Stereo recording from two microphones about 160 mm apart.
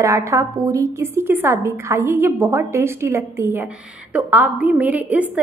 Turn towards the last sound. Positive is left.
turn(degrees=-10)  # may be behind; listen again after turning